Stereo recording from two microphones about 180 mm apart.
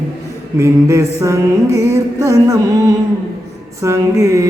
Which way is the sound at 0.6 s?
15° right (ahead or behind).